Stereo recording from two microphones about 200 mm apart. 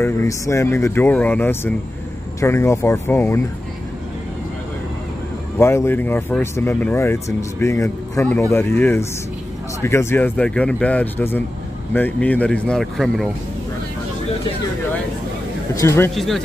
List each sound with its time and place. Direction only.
0.0 s speech: 15° left (ahead or behind)
5.6 s speech: 15° left (ahead or behind)
15.7 s speech: 15° left (ahead or behind)
16.2 s speech: centre (ahead or behind)